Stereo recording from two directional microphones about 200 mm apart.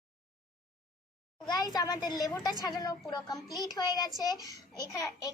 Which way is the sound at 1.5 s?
20° left (ahead or behind).